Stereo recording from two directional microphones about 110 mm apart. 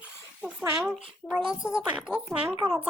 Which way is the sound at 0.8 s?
Centre (ahead or behind).